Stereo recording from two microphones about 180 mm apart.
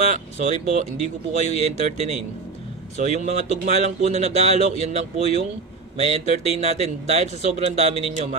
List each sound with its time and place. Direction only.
0.1 s speech: 40° right (ahead or behind)